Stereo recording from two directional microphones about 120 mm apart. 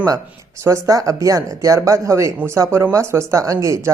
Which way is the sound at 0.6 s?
25° right (ahead or behind).